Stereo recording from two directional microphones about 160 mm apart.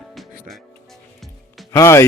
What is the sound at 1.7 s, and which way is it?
Speech, 15° left (ahead or behind).